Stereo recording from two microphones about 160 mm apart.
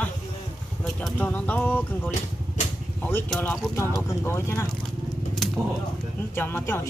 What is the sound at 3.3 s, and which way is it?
Speech, 10° left (ahead or behind).